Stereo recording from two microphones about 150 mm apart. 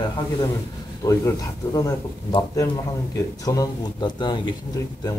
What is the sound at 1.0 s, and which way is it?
Speech, 25° left (ahead or behind).